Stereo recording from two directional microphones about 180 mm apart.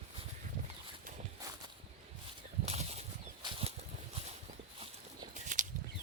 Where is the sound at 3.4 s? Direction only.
30° right (ahead or behind).